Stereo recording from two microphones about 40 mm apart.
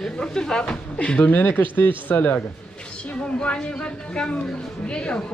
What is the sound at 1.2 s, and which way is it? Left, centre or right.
Speech, left.